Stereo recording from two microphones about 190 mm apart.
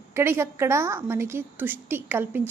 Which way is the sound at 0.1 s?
15° right (ahead or behind).